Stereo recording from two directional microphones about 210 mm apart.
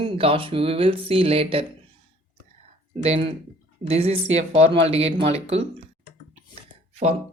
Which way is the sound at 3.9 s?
30° right (ahead or behind).